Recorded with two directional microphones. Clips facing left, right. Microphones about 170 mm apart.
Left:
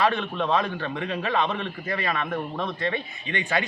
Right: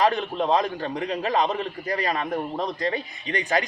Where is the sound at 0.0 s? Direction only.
35° right (ahead or behind).